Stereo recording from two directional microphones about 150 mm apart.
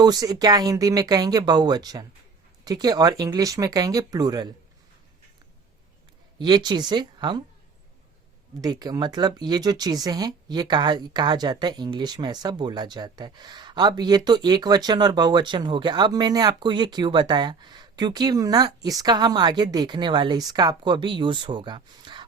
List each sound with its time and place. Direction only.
0.0 s speech: 25° right (ahead or behind)
6.4 s speech: 30° right (ahead or behind)
8.6 s speech: 25° right (ahead or behind)